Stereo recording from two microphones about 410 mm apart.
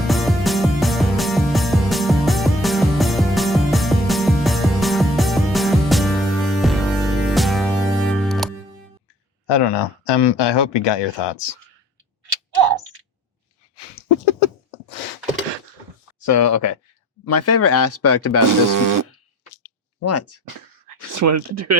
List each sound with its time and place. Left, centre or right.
0.1 s music: centre
9.5 s speech: left
12.5 s tick-tock: right
14.0 s a sound: left
16.2 s speech: left
18.7 s speech: right
20.0 s speech: left
21.1 s speech: right